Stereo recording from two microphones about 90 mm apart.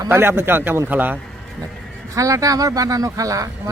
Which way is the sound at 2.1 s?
40° right (ahead or behind).